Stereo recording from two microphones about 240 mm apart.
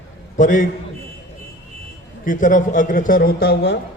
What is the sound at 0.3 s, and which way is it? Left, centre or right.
Speech, left.